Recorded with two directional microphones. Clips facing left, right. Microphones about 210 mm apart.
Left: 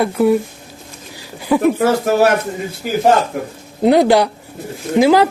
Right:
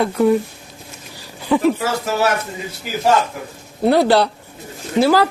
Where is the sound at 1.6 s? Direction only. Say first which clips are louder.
Left 4 dB; 55° left (ahead or behind).